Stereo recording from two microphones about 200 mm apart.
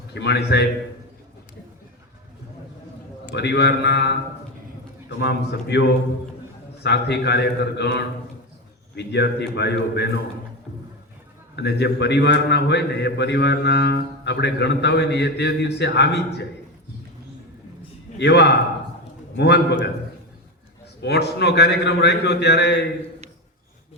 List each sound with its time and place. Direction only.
0.1 s a man's voice: 60° left (ahead or behind)
3.3 s a man's voice: 55° left (ahead or behind)
6.8 s a man's voice: 55° left (ahead or behind)
11.5 s a man's voice: 55° left (ahead or behind)
18.2 s a man's voice: 55° left (ahead or behind)
21.0 s a man's voice: 55° left (ahead or behind)